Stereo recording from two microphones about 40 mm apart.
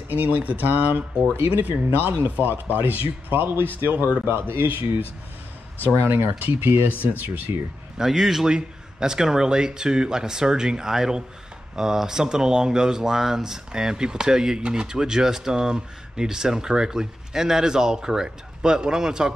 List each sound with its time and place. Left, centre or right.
0.1 s speech: right
4.3 s speech: right
7.0 s speech: right
8.0 s speech: centre